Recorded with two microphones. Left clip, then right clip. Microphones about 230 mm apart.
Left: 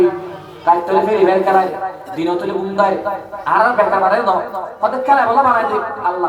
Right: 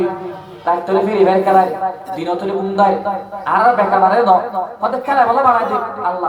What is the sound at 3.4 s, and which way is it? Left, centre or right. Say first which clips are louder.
A man's voice: even; right.